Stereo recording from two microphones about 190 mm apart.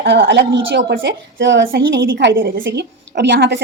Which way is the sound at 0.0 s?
65° right (ahead or behind).